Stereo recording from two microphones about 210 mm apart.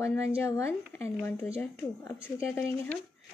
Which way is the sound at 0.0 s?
15° left (ahead or behind).